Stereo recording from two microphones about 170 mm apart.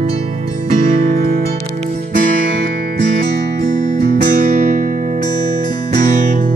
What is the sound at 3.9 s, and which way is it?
Music, 50° right (ahead or behind).